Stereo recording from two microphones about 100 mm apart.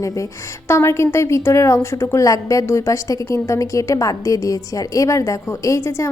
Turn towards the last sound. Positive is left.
turn(degrees=30)  # may be behind; listen again after turning